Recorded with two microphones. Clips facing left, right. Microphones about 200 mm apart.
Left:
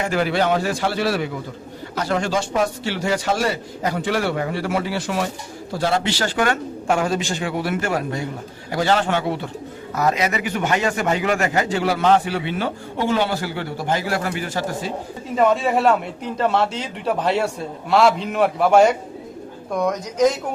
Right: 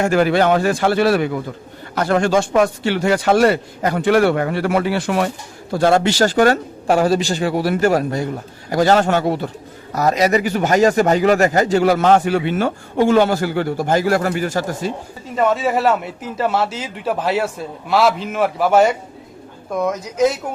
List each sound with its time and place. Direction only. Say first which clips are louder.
0.0 s a man's voice: right 5 dB; 50° right (ahead or behind)
15.4 s a man's voice: even; centre (ahead or behind)